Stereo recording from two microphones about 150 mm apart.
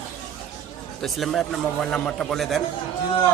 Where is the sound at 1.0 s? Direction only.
Centre (ahead or behind).